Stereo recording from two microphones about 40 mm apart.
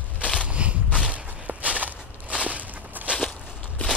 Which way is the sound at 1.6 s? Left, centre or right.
Right.